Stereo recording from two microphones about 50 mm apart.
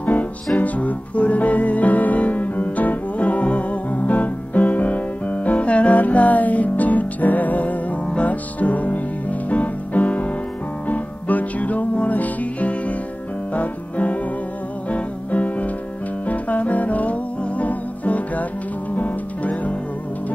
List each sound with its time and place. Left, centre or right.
0.0 s music: left
13.5 s piano: left
14.9 s music: left